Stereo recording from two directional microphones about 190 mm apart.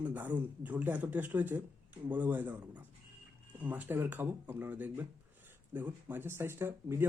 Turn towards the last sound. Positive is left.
turn(degrees=-10)  # may be behind; listen again after turning